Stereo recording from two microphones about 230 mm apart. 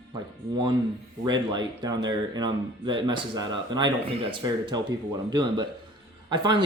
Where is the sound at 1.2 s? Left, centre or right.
Centre.